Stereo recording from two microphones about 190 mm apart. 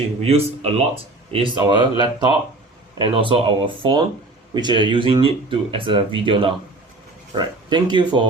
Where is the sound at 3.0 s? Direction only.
25° right (ahead or behind).